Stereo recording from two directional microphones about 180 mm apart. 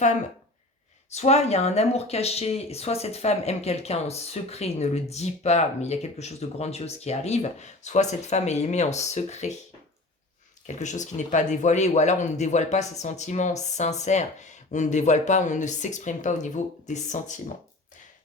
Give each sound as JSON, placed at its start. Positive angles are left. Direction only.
{"t": 1.1, "sound": "speech", "side_deg": 35}
{"t": 10.7, "sound": "speech", "side_deg": 40}